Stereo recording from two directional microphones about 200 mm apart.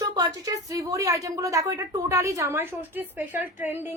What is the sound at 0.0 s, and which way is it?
A woman's voice, 20° right (ahead or behind).